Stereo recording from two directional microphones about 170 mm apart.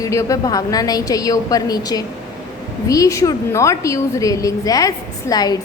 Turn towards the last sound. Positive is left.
turn(degrees=20)  # may be behind; listen again after turning